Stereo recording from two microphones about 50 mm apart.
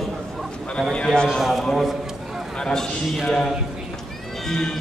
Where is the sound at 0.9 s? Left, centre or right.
Centre.